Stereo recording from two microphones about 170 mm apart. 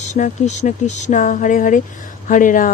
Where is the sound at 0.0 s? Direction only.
45° left (ahead or behind).